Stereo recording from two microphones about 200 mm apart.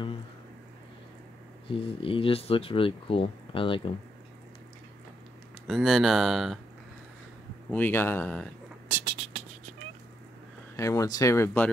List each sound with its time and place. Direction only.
1.7 s speech: 25° left (ahead or behind)
5.7 s speech: centre (ahead or behind)
7.7 s speech: 10° left (ahead or behind)
8.8 s a sound: 10° right (ahead or behind)
10.8 s speech: 15° left (ahead or behind)